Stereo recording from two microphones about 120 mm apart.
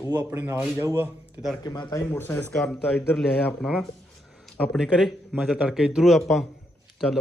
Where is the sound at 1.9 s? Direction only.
20° left (ahead or behind).